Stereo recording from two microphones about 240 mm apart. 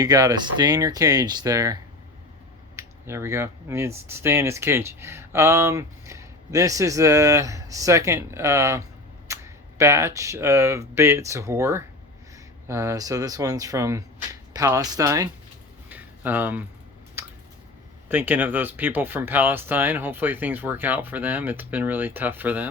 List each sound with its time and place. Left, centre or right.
0.0 s speech: centre
15.9 s a sound: centre
18.1 s speech: centre